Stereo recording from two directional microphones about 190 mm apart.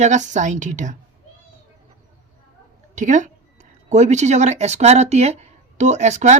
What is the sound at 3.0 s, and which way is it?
A woman's voice, 40° right (ahead or behind).